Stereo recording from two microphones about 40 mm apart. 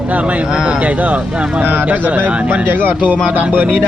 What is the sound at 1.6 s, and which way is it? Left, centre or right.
Speech, right.